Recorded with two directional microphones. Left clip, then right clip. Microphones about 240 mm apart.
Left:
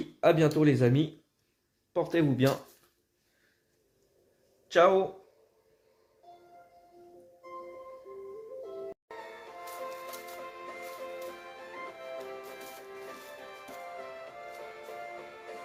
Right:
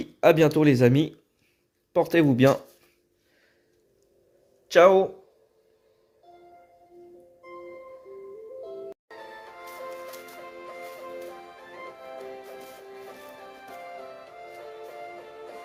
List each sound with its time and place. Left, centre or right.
0.0 s speech: right
4.7 s speech: right